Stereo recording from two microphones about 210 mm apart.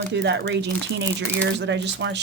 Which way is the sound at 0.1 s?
55° right (ahead or behind).